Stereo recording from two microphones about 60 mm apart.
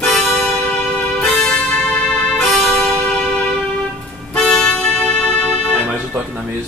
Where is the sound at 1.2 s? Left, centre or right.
Centre.